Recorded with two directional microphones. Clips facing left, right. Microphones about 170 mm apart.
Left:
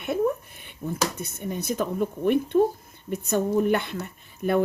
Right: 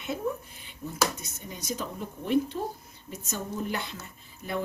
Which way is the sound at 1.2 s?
60° left (ahead or behind).